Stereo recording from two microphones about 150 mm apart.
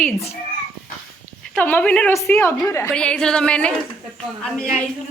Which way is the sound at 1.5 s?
10° left (ahead or behind).